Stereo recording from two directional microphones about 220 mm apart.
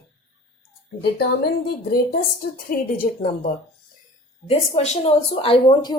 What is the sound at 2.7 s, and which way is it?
Speech, 40° left (ahead or behind).